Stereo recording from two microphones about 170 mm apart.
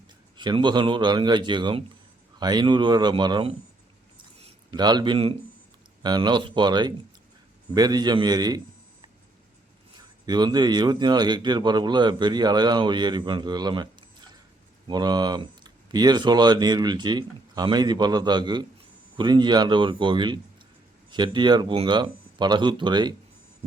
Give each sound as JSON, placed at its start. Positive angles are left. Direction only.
{"t": 0.3, "sound": "speech", "side_deg": -25}
{"t": 4.7, "sound": "speech", "side_deg": -25}
{"t": 10.2, "sound": "speech", "side_deg": -25}